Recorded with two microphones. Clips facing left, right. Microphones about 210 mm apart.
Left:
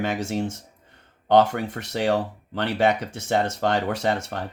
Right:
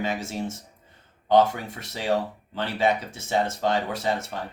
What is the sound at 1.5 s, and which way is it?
Speech, 60° left (ahead or behind).